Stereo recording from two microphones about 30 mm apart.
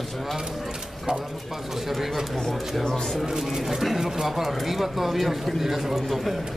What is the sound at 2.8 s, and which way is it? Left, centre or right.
Speech, centre.